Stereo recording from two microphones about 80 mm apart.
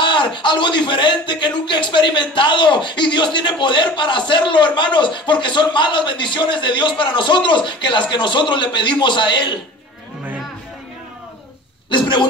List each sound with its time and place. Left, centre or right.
0.0 s a man's voice: left
11.9 s speech: left